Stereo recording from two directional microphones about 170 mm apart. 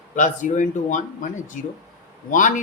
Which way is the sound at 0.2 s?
50° left (ahead or behind).